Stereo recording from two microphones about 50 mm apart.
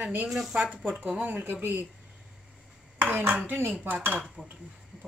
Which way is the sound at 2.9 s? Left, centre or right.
Right.